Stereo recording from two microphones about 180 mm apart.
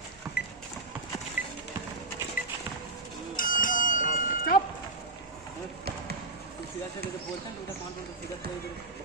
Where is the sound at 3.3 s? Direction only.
50° left (ahead or behind).